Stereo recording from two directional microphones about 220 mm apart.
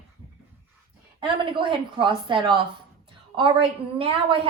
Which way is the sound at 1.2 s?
20° right (ahead or behind).